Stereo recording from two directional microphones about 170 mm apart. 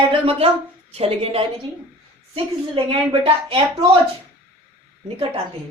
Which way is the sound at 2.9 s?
35° right (ahead or behind).